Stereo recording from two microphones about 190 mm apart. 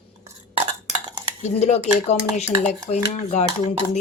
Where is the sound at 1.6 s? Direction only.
35° left (ahead or behind).